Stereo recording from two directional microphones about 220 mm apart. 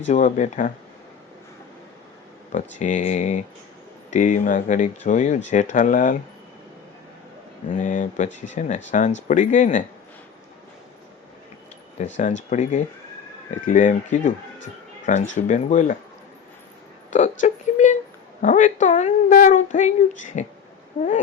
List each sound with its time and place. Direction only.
0.1 s a woman's voice: 35° left (ahead or behind)
2.5 s a woman's voice: 35° left (ahead or behind)
7.7 s a woman's voice: 35° left (ahead or behind)
12.5 s a woman's voice: 35° left (ahead or behind)
17.1 s a woman's voice: 35° left (ahead or behind)